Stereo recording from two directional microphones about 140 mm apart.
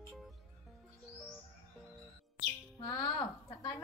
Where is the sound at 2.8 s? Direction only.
30° left (ahead or behind).